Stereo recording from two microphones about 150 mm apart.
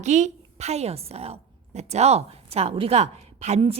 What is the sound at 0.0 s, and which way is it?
A woman's voice, 50° right (ahead or behind).